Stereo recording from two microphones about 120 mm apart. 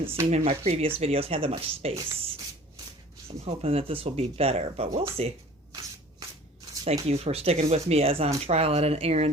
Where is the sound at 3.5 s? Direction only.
55° right (ahead or behind).